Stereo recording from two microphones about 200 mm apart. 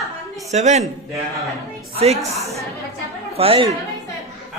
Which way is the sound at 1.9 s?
30° right (ahead or behind).